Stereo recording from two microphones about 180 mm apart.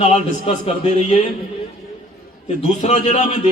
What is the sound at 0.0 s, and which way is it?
A man's voice, 35° left (ahead or behind).